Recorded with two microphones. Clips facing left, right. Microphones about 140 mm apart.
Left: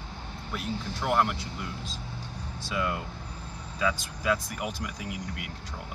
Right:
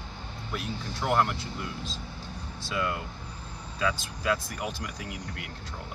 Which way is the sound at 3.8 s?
5° left (ahead or behind).